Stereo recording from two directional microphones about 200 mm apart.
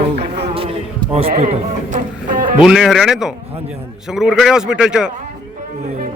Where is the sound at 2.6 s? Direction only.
5° right (ahead or behind).